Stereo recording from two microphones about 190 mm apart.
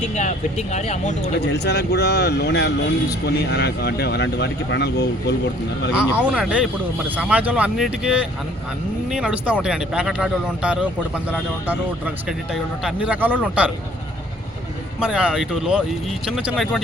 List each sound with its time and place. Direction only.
0.2 s speech: 40° left (ahead or behind)
1.5 s speech: 60° left (ahead or behind)
6.1 s speech: 5° right (ahead or behind)
15.0 s speech: 5° right (ahead or behind)